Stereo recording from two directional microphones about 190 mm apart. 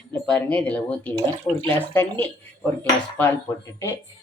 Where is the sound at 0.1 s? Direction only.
5° left (ahead or behind).